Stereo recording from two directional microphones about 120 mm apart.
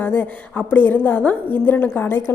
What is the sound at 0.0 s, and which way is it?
A woman's voice, 15° left (ahead or behind).